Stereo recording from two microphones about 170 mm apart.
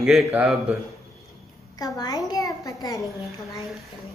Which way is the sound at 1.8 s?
20° left (ahead or behind).